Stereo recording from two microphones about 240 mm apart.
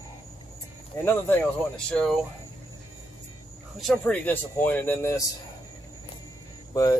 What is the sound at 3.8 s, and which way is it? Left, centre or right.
Speech, centre.